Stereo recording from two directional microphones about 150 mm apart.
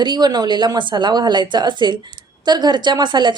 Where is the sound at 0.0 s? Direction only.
30° right (ahead or behind).